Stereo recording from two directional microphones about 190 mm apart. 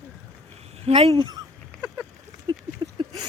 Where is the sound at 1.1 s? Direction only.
20° right (ahead or behind).